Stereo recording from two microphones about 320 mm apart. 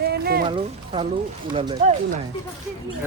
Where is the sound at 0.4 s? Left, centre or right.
Centre.